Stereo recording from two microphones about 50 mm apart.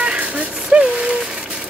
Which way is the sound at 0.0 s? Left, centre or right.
Right.